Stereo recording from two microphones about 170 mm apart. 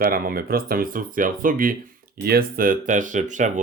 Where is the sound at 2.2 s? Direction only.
65° right (ahead or behind); by 3.5 s 45° right (ahead or behind).